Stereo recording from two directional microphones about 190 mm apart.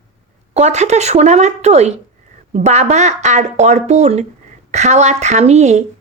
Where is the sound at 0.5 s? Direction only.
35° right (ahead or behind).